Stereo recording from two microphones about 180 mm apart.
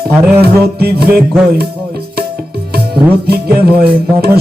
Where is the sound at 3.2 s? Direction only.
60° right (ahead or behind).